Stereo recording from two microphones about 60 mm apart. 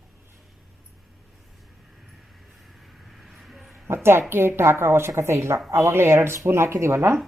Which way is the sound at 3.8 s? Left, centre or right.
Right.